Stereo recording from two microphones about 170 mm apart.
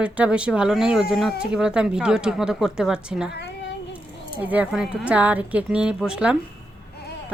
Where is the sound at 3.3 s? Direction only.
80° left.